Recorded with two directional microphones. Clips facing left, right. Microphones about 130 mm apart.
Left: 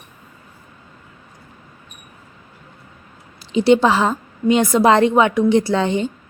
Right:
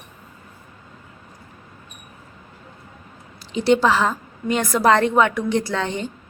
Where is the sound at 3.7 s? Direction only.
30° left (ahead or behind).